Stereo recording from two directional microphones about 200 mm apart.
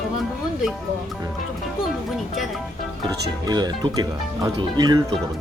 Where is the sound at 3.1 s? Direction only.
20° right (ahead or behind).